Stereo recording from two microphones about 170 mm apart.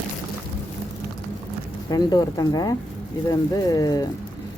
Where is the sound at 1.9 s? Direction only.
25° left (ahead or behind).